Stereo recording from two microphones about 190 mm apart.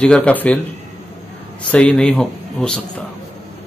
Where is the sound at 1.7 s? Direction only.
5° left (ahead or behind).